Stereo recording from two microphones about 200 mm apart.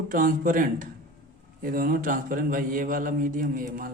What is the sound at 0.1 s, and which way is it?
A man's voice, 45° right (ahead or behind).